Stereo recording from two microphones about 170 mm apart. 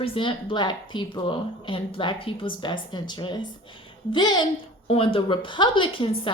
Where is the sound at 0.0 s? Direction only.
30° left (ahead or behind).